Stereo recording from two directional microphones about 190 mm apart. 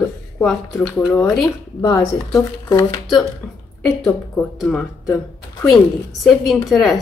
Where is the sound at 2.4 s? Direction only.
20° left (ahead or behind).